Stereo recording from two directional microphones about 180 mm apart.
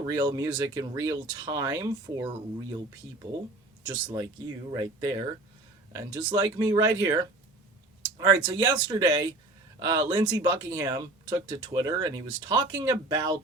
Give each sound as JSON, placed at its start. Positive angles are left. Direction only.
{"t": 0.0, "sound": "speech", "side_deg": -20}
{"t": 3.9, "sound": "speech", "side_deg": -15}